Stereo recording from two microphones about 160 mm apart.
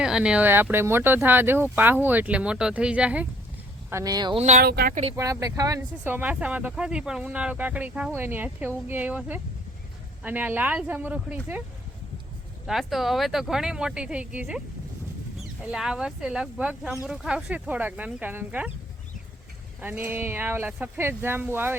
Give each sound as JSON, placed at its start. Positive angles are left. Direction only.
{"t": 0.0, "sound": "speech", "side_deg": -5}
{"t": 3.8, "sound": "speech", "side_deg": -20}
{"t": 4.4, "sound": "speech", "side_deg": -45}
{"t": 4.6, "sound": "speech", "side_deg": -80}
{"t": 5.1, "sound": "speech", "side_deg": -20}
{"t": 12.6, "sound": "speech", "side_deg": 0}
{"t": 15.6, "sound": "speech", "side_deg": -5}
{"t": 19.8, "sound": "speech", "side_deg": -15}